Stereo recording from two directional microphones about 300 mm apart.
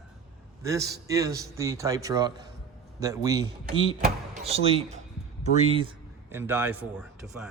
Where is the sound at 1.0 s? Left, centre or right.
Centre.